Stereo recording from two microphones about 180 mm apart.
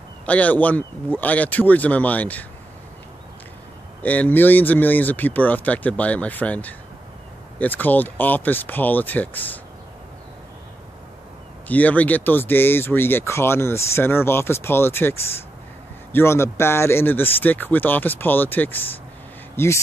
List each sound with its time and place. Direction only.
0.2 s speech: 10° left (ahead or behind)
4.0 s speech: 10° left (ahead or behind)
11.6 s speech: 10° left (ahead or behind)